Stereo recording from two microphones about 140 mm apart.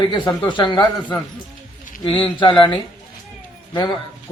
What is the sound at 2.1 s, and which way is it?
Speech, 35° left (ahead or behind).